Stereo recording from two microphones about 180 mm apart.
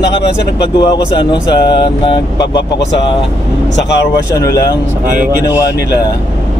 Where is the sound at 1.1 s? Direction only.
25° left (ahead or behind).